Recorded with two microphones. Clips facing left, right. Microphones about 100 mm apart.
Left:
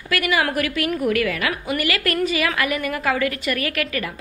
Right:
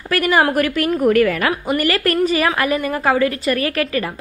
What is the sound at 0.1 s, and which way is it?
A woman's voice, 40° right (ahead or behind).